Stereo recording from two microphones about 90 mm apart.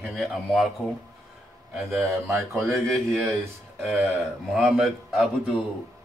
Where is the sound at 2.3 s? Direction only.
30° right (ahead or behind).